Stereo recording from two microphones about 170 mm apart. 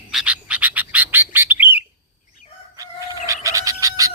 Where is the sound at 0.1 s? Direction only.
5° right (ahead or behind).